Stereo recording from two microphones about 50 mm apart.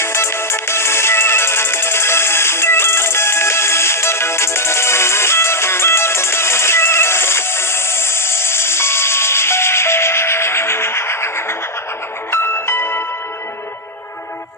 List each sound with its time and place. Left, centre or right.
0.0 s music: left